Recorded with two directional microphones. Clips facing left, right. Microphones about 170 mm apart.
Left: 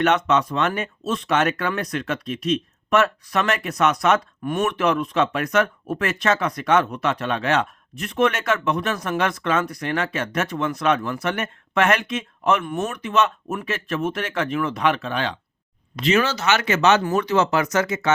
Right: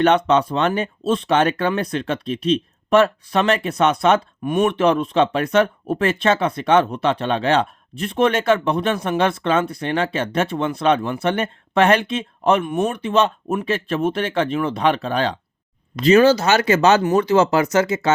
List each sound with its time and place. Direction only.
0.0 s speech: 30° right (ahead or behind)
12.6 s speech: 20° right (ahead or behind)
12.9 s speech: 30° right (ahead or behind)